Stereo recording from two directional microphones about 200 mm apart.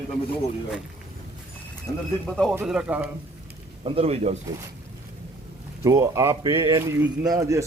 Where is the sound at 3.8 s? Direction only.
30° right (ahead or behind).